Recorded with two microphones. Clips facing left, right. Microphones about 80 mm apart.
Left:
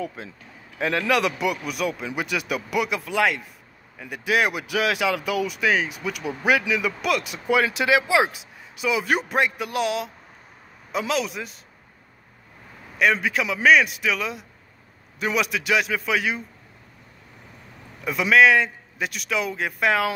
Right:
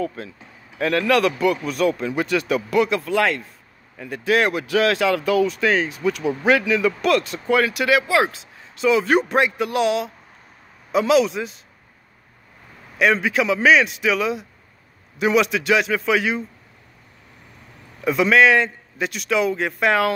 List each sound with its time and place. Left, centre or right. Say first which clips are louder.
0.0 s speech: right 5 dB; centre
7.6 s a man's voice: right 2 dB; left; by 11.6 s centre
13.0 s a man's voice: right 3 dB; centre
18.0 s a man's voice: right 2 dB; centre